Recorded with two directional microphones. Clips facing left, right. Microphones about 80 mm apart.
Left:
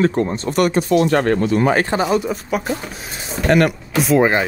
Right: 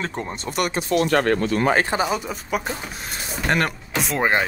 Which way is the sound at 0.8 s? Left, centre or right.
Left.